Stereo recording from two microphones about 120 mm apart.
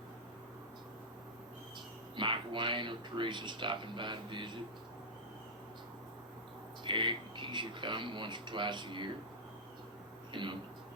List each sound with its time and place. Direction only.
2.1 s speech: 45° right (ahead or behind)
6.8 s speech: 40° right (ahead or behind)
10.3 s speech: 45° right (ahead or behind)